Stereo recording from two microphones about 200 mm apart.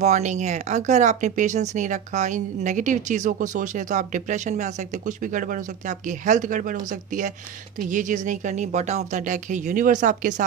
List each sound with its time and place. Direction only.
0.0 s speech: 35° right (ahead or behind)